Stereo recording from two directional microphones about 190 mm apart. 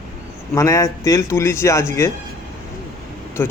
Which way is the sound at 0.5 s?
15° left (ahead or behind).